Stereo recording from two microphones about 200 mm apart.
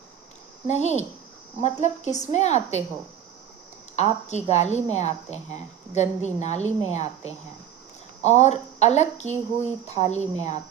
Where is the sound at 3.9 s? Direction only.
35° left (ahead or behind).